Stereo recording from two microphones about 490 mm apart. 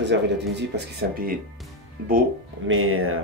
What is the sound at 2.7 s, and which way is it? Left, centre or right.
Speech, right.